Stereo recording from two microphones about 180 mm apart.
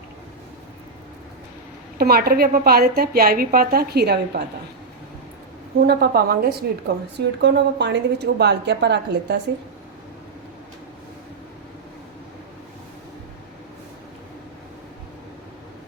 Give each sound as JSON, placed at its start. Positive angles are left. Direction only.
{"t": 2.0, "sound": "a woman's voice", "side_deg": -60}
{"t": 5.8, "sound": "a woman's voice", "side_deg": -60}
{"t": 7.2, "sound": "a woman's voice", "side_deg": -70}